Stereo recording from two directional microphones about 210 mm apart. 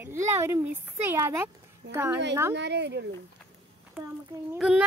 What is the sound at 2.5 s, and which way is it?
Speech, 55° right (ahead or behind).